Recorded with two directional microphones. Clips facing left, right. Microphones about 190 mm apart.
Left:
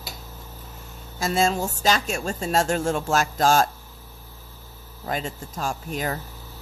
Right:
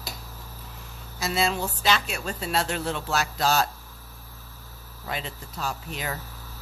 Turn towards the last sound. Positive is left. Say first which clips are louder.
# left 5 dB
turn(degrees=45)  # may be behind; listen again after turning